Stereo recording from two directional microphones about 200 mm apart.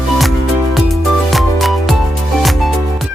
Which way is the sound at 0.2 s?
Centre (ahead or behind).